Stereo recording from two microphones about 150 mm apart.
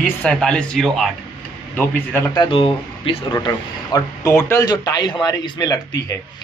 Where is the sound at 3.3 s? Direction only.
25° left (ahead or behind).